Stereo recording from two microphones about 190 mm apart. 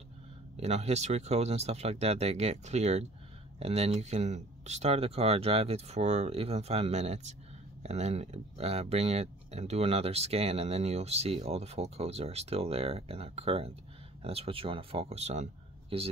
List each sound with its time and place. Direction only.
0.6 s speech: 35° right (ahead or behind)